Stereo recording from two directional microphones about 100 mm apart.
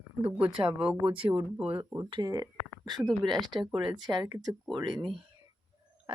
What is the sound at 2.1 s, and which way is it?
Speech, 40° right (ahead or behind).